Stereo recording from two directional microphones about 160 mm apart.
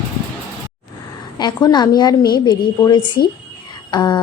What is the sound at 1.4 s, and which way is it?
A woman's voice, 25° left (ahead or behind).